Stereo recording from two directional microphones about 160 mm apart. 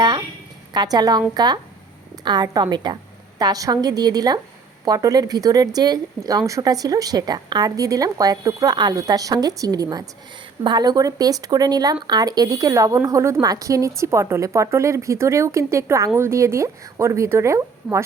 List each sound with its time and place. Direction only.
0.7 s speech: 25° right (ahead or behind)